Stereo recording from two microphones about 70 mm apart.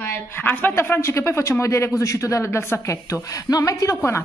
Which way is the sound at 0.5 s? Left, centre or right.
Left.